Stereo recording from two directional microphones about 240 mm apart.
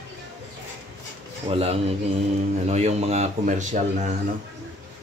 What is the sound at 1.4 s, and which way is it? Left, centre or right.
Speech, right.